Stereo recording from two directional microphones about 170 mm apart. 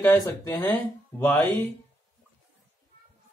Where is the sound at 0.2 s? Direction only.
25° left (ahead or behind).